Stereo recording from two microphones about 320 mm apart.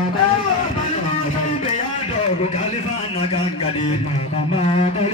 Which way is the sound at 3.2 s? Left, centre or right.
Centre.